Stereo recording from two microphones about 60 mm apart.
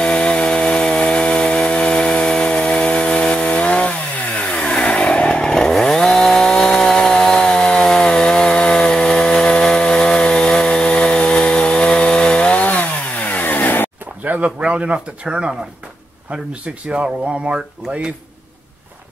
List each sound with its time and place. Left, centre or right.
0.0 s chainsaw: centre; by 13.8 s left
14.2 s speech: right